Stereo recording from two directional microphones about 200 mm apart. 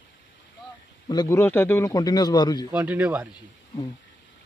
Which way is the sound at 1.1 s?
15° left (ahead or behind).